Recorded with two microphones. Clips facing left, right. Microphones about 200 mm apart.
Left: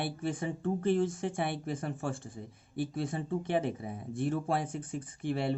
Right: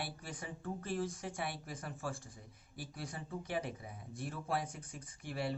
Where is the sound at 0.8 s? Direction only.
30° left (ahead or behind).